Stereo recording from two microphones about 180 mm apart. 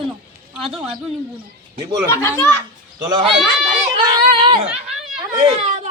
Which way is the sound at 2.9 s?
25° right (ahead or behind).